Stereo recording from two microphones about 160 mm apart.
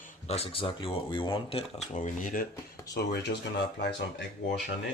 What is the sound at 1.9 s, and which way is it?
Speech, 55° left (ahead or behind).